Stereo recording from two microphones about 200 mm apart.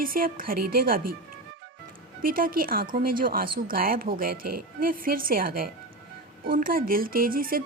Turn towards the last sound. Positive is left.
turn(degrees=-45)  # may be behind; listen again after turning